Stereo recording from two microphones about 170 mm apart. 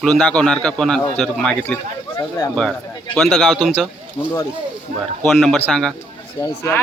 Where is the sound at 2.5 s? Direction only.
5° left (ahead or behind).